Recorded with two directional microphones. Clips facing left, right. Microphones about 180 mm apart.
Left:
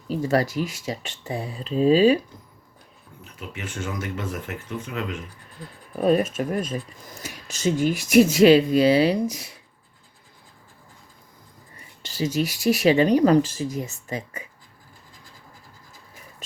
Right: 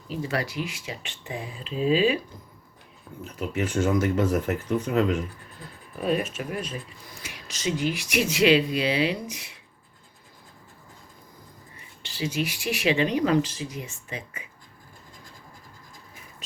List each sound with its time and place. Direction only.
0.1 s speech: 40° left (ahead or behind)
3.3 s speech: 40° right (ahead or behind)
6.0 s speech: 40° left (ahead or behind)
12.0 s speech: 40° left (ahead or behind)